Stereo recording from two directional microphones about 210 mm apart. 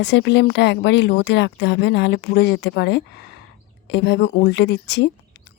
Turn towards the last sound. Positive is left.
turn(degrees=55)  # may be behind; listen again after turning